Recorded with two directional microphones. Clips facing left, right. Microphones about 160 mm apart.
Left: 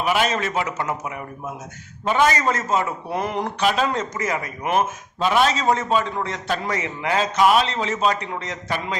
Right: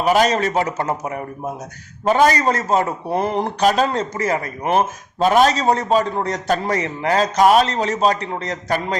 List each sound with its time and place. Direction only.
0.0 s a man's voice: 40° right (ahead or behind)